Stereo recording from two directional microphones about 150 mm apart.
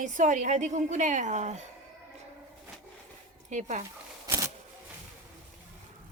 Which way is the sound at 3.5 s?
55° right (ahead or behind).